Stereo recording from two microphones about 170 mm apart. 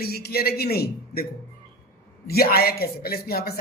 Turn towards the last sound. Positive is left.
turn(degrees=65)  # may be behind; listen again after turning